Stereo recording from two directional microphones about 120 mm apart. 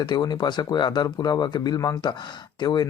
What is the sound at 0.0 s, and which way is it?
Speech, 35° left (ahead or behind).